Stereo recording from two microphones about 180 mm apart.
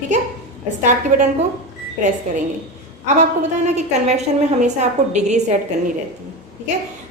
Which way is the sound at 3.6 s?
40° right (ahead or behind).